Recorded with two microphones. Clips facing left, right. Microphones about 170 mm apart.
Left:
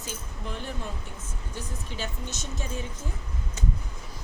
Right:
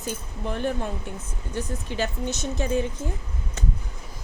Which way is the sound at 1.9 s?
70° right (ahead or behind).